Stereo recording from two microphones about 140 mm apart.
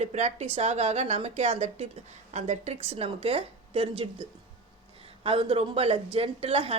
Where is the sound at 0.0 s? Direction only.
55° right (ahead or behind).